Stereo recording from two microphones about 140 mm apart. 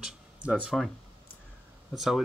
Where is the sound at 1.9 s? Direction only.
Centre (ahead or behind).